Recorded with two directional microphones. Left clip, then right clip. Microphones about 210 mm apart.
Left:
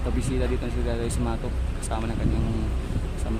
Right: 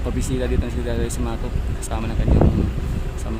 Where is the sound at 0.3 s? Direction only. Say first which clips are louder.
Right 5 dB; centre (ahead or behind).